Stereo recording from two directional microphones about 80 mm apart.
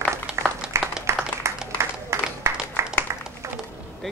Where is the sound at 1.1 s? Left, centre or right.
Right.